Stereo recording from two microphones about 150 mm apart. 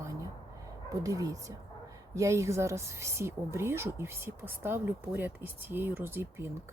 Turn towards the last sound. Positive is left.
turn(degrees=-15)  # may be behind; listen again after turning